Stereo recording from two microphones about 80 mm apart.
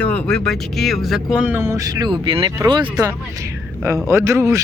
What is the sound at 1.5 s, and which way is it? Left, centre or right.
Speech, right.